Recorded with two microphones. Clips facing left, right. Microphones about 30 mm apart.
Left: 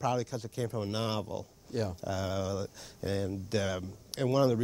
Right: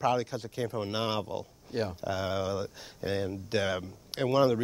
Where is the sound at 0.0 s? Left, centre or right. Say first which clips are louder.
Right 3 dB; right.